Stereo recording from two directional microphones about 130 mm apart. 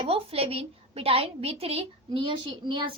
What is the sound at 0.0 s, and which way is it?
A woman's voice, 45° right (ahead or behind).